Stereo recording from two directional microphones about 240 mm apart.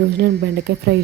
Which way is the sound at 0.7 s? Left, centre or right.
Right.